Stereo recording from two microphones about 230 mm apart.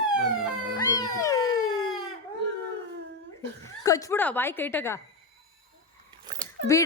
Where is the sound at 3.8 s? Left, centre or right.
Centre.